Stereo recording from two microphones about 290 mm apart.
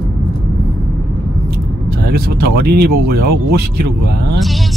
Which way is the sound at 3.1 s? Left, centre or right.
Right.